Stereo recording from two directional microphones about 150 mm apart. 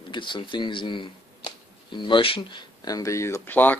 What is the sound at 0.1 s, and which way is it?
Speech, 30° left (ahead or behind).